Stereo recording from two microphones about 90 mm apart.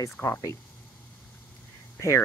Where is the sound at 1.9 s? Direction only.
30° left (ahead or behind).